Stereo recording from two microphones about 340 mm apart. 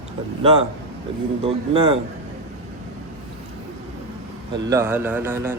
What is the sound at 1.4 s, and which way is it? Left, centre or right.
Speech, centre.